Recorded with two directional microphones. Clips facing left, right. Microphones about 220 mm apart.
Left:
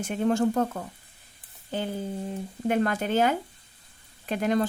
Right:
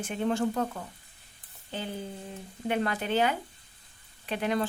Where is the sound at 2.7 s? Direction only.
45° left (ahead or behind).